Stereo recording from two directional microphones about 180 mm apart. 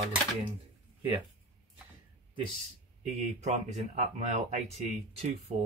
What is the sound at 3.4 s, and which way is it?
Speech, 40° right (ahead or behind).